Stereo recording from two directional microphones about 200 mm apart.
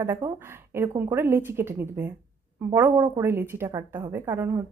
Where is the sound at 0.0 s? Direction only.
15° right (ahead or behind).